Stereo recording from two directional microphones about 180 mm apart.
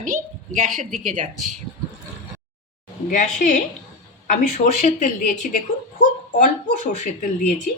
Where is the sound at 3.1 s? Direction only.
45° left (ahead or behind).